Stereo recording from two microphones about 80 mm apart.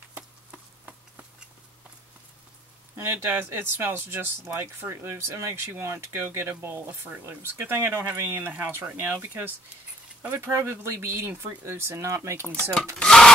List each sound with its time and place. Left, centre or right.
3.0 s speech: right
12.9 s speech: centre